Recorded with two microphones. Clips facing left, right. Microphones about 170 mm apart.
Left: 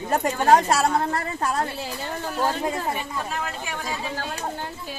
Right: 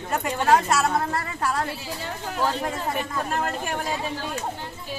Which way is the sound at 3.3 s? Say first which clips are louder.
Right 4 dB; 50° right (ahead or behind).